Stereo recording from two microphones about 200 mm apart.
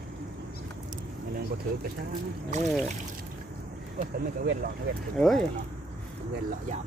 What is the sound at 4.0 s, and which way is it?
Speech, 45° right (ahead or behind).